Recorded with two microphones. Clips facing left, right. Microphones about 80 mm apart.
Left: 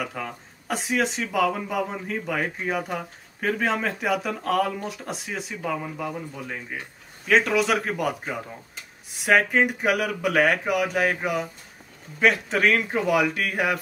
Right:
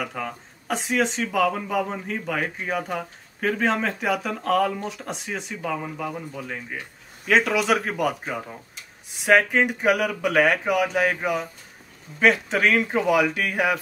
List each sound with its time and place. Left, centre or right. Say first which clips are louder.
0.0 s speech: right 1 dB; centre